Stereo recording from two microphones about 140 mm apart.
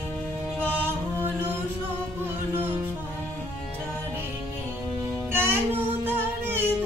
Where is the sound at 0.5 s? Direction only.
10° left (ahead or behind).